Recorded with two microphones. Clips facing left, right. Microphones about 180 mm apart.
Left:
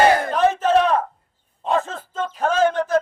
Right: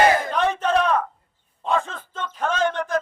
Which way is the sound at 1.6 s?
40° left (ahead or behind).